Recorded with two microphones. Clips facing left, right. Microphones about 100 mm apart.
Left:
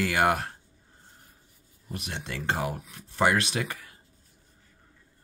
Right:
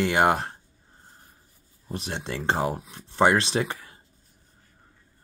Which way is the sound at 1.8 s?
30° right (ahead or behind).